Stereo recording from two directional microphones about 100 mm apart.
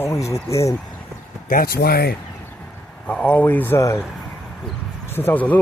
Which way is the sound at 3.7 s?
30° left (ahead or behind).